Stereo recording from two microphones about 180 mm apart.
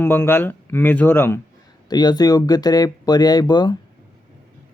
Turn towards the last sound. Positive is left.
turn(degrees=25)  # may be behind; listen again after turning